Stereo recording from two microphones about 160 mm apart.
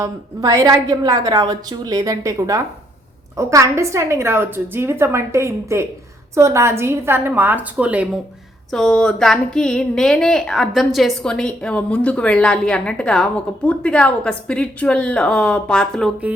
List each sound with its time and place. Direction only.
0.0 s a woman's voice: 20° right (ahead or behind)
8.7 s a woman's voice: 5° left (ahead or behind)